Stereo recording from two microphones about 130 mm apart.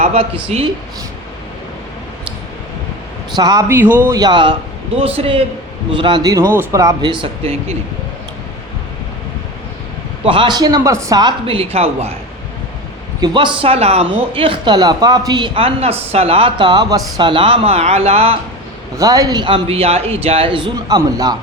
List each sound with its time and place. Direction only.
0.0 s a sound: 55° right (ahead or behind)
0.5 s speech: 55° right (ahead or behind)
3.3 s a man's voice: 30° right (ahead or behind)
3.7 s speech: 15° right (ahead or behind)
4.1 s a man's voice: 35° right (ahead or behind)
10.2 s a man's voice: 40° right (ahead or behind)
13.2 s speech: 35° right (ahead or behind)
14.3 s a man's voice: 40° right (ahead or behind)
18.9 s a man's voice: 25° right (ahead or behind)